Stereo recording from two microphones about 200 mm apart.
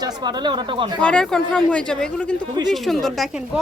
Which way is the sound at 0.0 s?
20° right (ahead or behind).